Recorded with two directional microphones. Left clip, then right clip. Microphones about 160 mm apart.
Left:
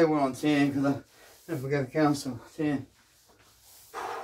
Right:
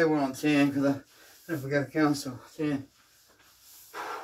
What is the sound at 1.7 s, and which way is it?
Speech, 5° left (ahead or behind).